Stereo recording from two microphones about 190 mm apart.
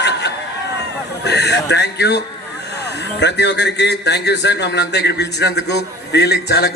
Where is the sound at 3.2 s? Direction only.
65° left (ahead or behind).